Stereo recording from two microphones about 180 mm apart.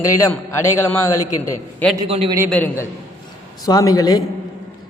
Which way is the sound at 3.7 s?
20° left (ahead or behind).